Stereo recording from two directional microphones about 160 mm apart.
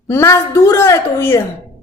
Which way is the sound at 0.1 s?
15° left (ahead or behind).